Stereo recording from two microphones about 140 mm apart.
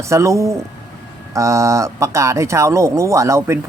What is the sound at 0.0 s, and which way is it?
Speech, 20° right (ahead or behind).